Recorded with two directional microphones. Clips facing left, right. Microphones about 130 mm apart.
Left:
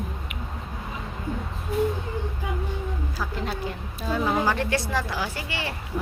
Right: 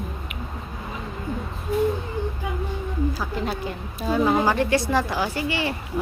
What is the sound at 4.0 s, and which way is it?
A woman's voice, 10° right (ahead or behind).